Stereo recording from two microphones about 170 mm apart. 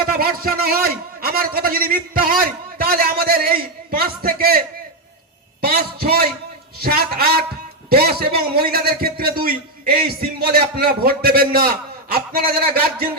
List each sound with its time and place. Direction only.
0.1 s a man's voice: 60° right (ahead or behind)
5.6 s a man's voice: 65° right (ahead or behind)